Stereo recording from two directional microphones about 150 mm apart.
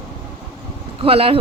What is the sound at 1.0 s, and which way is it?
Speech, 40° right (ahead or behind).